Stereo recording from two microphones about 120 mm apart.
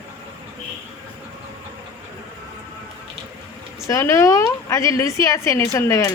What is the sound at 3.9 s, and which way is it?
A woman's voice, 25° left (ahead or behind).